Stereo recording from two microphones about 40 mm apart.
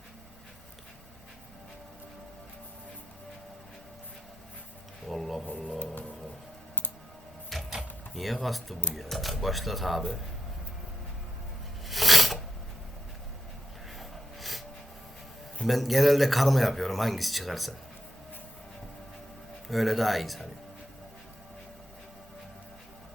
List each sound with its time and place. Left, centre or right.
5.0 s speech: centre
5.8 s music: left
7.5 s music: centre
8.1 s speech: centre
11.9 s filing: centre
14.0 s a sound: centre
15.6 s speech: centre
19.6 s speech: centre